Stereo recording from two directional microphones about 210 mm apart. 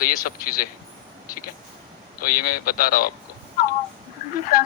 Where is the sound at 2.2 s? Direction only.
45° left (ahead or behind).